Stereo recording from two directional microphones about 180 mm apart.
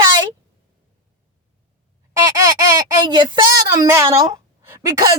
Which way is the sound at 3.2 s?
25° right (ahead or behind).